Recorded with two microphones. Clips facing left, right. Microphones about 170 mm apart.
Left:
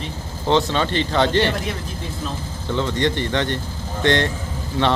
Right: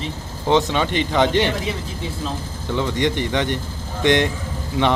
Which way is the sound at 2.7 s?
15° right (ahead or behind).